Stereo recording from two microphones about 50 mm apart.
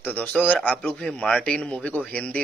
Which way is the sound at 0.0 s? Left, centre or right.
Left.